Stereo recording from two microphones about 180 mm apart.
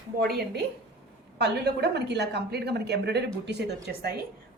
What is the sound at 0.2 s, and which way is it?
A woman's voice, 60° right (ahead or behind).